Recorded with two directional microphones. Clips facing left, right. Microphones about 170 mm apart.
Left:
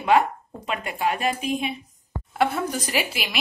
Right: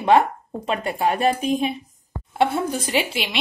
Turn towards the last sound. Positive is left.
turn(degrees=-25)  # may be behind; listen again after turning